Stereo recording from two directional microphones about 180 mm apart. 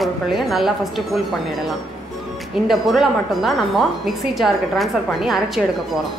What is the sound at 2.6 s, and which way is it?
A woman's voice, centre (ahead or behind).